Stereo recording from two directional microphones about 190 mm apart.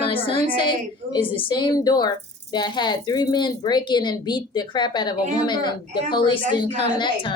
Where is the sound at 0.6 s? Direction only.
25° left (ahead or behind).